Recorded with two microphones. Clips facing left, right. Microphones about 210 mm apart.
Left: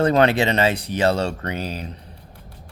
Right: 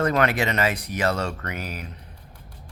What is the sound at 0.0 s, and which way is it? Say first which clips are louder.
Speech: left 5 dB; 30° left (ahead or behind).